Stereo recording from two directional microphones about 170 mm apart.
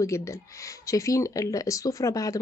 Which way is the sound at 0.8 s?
20° left (ahead or behind).